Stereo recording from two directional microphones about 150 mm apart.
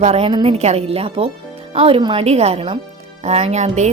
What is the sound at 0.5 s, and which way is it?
A woman's voice, 45° right (ahead or behind).